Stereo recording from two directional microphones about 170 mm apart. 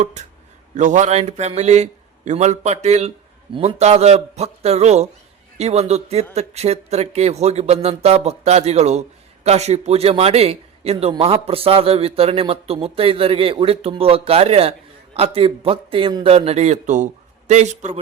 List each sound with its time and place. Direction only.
0.0 s a man's voice: 40° right (ahead or behind)